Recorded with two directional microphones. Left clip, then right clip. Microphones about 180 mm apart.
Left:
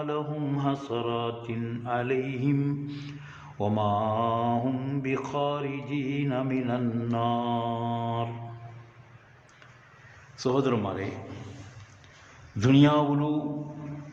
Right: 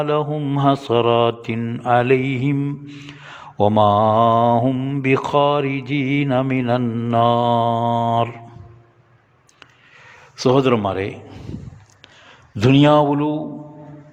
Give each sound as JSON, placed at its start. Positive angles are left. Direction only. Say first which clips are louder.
{"t": 0.0, "sound": "mantra", "louder": "right 12 dB", "side_deg": -55}
{"t": 0.3, "sound": "mantra", "louder": "right 9 dB", "side_deg": -35}
{"t": 0.6, "sound": "mantra", "louder": "right 16 dB", "side_deg": -55}
{"t": 2.6, "sound": "mantra", "louder": "right 5 dB", "side_deg": -30}
{"t": 3.2, "sound": "mantra", "louder": "right 15 dB", "side_deg": -50}
{"t": 4.6, "sound": "mantra", "louder": "right 10 dB", "side_deg": -40}
{"t": 5.0, "sound": "mantra", "louder": "right 14 dB", "side_deg": -55}
{"t": 10.3, "sound": "mantra", "louder": "right 11 dB", "side_deg": -45}
{"t": 12.5, "sound": "mantra", "louder": "right 9 dB", "side_deg": -45}